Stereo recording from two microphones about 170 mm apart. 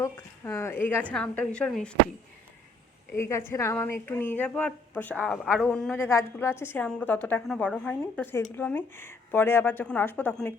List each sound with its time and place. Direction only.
0.0 s a woman's voice: 15° left (ahead or behind)
3.1 s a woman's voice: 15° left (ahead or behind)
6.1 s a woman's voice: 15° left (ahead or behind)